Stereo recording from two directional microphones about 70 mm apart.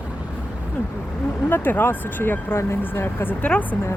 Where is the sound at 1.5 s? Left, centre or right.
Left.